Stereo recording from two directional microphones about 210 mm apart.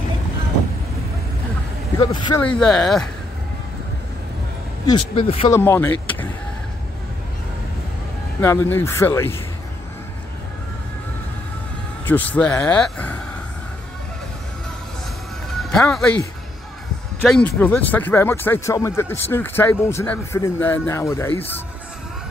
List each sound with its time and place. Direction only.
2.0 s speech: 15° left (ahead or behind)
2.4 s speech: 5° left (ahead or behind)
4.8 s speech: 25° left (ahead or behind)
5.5 s speech: 10° left (ahead or behind)
8.4 s speech: 10° left (ahead or behind)
12.1 s speech: 10° left (ahead or behind)
15.6 s speech: 5° left (ahead or behind)
17.2 s speech: 5° left (ahead or behind)